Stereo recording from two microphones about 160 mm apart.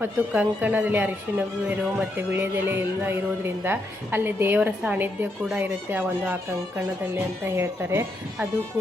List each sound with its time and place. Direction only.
0.0 s speech: 10° right (ahead or behind)
7.4 s speech: 15° right (ahead or behind)